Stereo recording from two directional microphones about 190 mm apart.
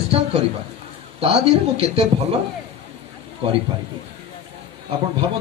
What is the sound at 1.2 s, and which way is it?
Speech, 30° right (ahead or behind).